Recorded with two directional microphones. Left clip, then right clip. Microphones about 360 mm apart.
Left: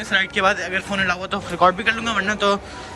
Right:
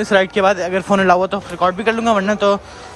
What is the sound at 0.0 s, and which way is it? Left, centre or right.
Speech, centre.